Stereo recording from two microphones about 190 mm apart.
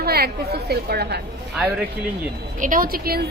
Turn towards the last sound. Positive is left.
turn(degrees=-50)  # may be behind; listen again after turning